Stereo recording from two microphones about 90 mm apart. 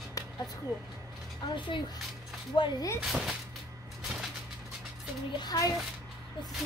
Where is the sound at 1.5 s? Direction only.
65° left (ahead or behind).